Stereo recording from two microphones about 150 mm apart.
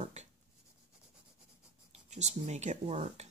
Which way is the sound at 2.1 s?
50° right (ahead or behind).